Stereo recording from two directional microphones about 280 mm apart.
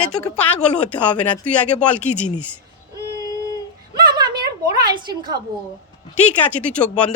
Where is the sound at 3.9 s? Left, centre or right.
Centre.